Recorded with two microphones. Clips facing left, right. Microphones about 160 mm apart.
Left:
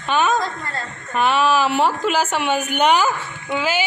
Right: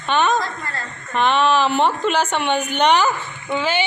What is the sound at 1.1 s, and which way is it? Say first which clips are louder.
A woman's voice: even; 5° left (ahead or behind).